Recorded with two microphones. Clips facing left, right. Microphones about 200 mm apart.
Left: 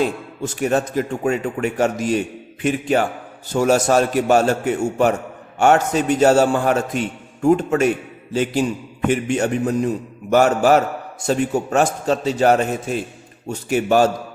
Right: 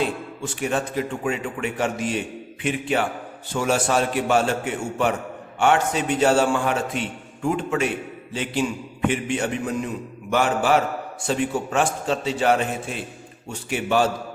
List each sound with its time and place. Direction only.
0.0 s a man's voice: 40° left (ahead or behind)